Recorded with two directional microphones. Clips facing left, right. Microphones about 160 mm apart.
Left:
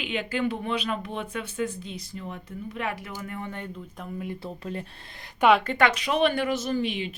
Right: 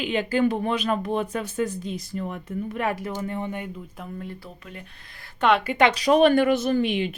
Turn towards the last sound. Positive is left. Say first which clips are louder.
# right 5 dB
turn(degrees=-55)  # may be behind; listen again after turning